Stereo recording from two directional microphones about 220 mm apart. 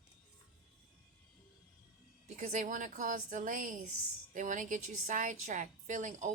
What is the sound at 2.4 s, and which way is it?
A woman's voice, 35° right (ahead or behind).